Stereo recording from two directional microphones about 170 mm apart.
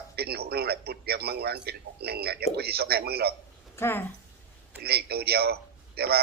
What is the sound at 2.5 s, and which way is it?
Speech, 65° right (ahead or behind).